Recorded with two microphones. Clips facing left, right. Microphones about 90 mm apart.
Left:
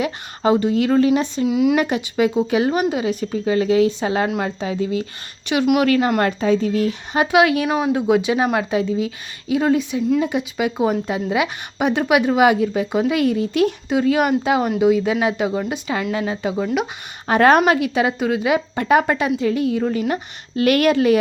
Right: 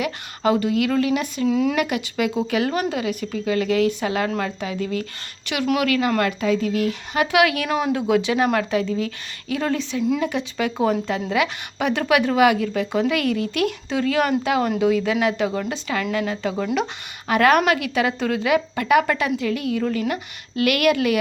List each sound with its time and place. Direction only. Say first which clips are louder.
0.0 s a woman's voice: left 2 dB; 25° left (ahead or behind)
1.5 s a woman's voice: left 2 dB; 10° left (ahead or behind)
1.7 s a woman's voice: left 4 dB; 30° left (ahead or behind)
5.8 s a woman's voice: left 3 dB; 35° left (ahead or behind)
17.2 s a woman's voice: left 3 dB; 30° left (ahead or behind)